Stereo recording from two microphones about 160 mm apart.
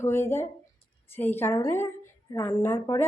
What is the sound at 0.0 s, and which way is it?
A woman's voice, 15° left (ahead or behind).